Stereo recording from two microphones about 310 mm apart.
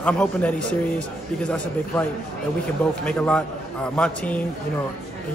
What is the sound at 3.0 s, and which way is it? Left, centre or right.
A man's voice, centre.